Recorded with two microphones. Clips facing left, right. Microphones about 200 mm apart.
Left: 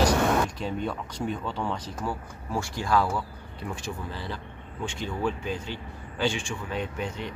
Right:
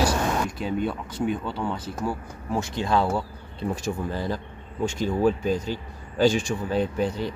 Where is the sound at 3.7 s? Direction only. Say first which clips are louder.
Right 7 dB; 45° right (ahead or behind).